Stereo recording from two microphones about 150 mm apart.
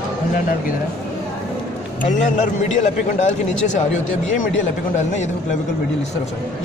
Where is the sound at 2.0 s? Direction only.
55° left (ahead or behind).